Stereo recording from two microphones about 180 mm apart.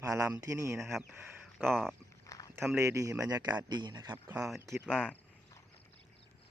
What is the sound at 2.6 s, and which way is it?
Speech, 15° right (ahead or behind).